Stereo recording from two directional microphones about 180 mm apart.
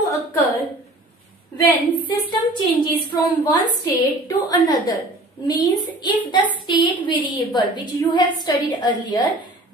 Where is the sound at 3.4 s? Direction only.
25° left (ahead or behind).